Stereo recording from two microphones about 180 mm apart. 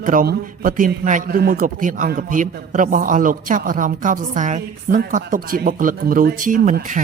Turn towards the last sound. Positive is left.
turn(degrees=-45)  # may be behind; listen again after turning